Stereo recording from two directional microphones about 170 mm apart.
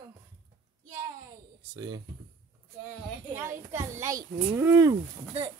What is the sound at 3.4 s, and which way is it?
Speech, 15° right (ahead or behind).